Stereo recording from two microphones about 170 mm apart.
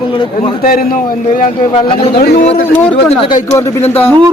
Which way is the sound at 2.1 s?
65° left (ahead or behind).